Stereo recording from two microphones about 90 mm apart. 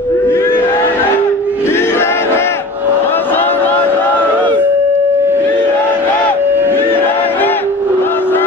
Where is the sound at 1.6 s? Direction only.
25° left (ahead or behind).